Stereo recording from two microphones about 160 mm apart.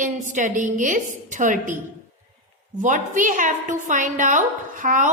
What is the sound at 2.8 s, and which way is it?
A woman's voice, 55° right (ahead or behind).